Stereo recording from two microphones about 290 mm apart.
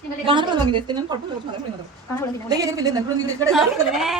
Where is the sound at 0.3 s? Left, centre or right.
Centre.